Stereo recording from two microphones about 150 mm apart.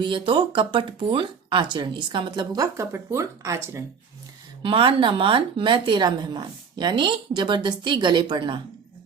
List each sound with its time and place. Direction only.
0.0 s speech: 35° right (ahead or behind)
4.6 s speech: 35° right (ahead or behind)